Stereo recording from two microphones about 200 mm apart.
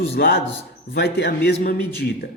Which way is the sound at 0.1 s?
55° left (ahead or behind).